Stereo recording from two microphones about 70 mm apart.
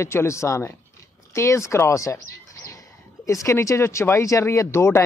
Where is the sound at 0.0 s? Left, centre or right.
Left.